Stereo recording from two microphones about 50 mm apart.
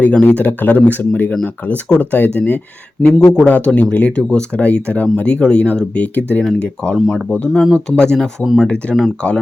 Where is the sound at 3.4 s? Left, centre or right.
Left.